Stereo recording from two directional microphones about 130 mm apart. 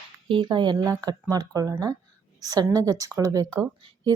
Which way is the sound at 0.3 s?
40° right (ahead or behind).